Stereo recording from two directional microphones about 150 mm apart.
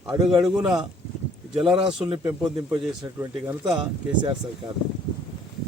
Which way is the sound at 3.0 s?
25° right (ahead or behind).